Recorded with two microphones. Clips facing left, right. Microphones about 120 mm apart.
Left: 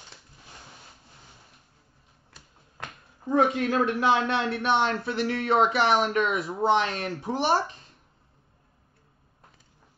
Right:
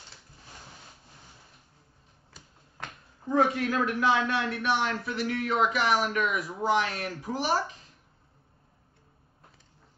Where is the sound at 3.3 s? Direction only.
20° left (ahead or behind).